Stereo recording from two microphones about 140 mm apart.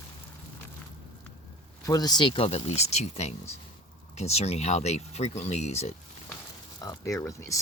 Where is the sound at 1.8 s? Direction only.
30° left (ahead or behind); by 5.9 s 50° left (ahead or behind).